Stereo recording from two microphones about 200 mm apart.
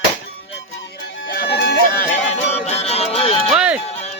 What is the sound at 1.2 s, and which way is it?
Music, 50° left (ahead or behind).